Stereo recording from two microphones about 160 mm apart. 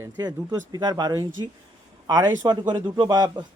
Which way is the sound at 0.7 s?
25° right (ahead or behind).